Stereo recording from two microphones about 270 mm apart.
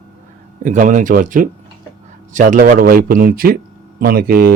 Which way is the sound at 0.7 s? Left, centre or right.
Right.